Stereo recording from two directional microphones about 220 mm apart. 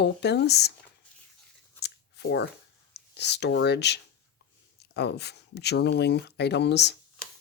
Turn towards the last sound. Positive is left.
turn(degrees=50)  # may be behind; listen again after turning